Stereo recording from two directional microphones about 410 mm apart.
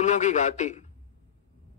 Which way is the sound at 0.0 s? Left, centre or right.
Centre.